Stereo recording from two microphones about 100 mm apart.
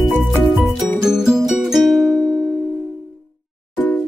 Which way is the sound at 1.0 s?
5° right (ahead or behind).